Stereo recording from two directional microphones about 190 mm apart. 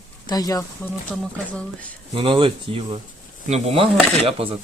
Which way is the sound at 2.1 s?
30° right (ahead or behind).